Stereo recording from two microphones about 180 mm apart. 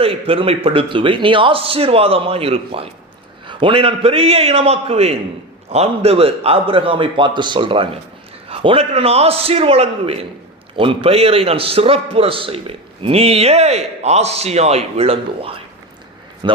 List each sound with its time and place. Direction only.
0.0 s a man's voice: 30° right (ahead or behind)